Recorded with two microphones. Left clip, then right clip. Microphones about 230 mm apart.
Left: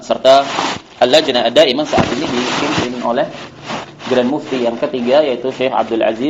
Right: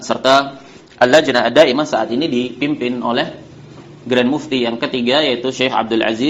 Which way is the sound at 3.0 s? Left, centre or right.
Right.